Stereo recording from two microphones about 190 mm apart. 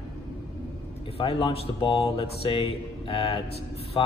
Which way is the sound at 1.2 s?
30° left (ahead or behind).